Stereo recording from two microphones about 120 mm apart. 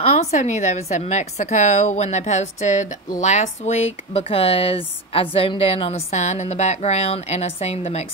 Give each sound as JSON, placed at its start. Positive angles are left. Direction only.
{"t": 0.0, "sound": "a woman's voice", "side_deg": 60}